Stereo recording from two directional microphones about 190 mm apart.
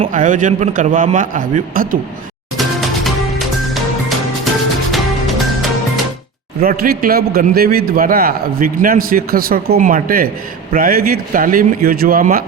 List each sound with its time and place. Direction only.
0.1 s a man's voice: 45° right (ahead or behind)
2.6 s music: centre (ahead or behind)
6.6 s a man's voice: 50° right (ahead or behind)